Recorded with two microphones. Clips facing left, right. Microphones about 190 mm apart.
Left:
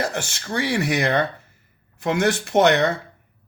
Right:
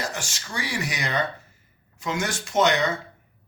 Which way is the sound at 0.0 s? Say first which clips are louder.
Left 6 dB; 60° left (ahead or behind).